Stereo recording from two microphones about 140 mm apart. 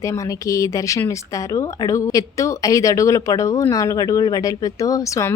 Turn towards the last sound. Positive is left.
turn(degrees=25)  # may be behind; listen again after turning